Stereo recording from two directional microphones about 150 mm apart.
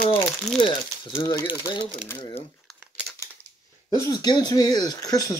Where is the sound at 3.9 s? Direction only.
25° left (ahead or behind).